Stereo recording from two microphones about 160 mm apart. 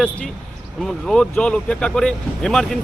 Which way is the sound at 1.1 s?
5° left (ahead or behind).